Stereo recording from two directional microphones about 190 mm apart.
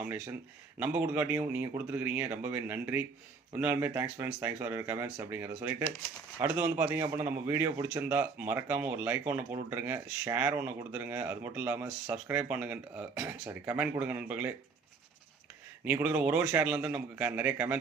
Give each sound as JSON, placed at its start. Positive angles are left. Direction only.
{"t": 0.0, "sound": "a man's voice", "side_deg": -10}
{"t": 15.8, "sound": "a man's voice", "side_deg": -10}